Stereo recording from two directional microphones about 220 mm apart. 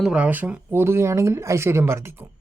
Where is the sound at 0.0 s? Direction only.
5° right (ahead or behind).